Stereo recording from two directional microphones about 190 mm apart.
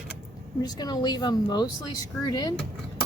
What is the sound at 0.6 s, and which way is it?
Speech, 20° left (ahead or behind).